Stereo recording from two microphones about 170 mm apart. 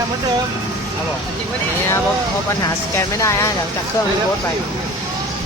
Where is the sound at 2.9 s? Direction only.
15° left (ahead or behind).